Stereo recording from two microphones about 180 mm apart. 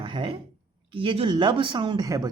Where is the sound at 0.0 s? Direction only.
30° right (ahead or behind).